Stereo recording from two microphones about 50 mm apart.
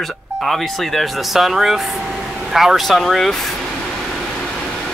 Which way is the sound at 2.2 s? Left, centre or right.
Centre.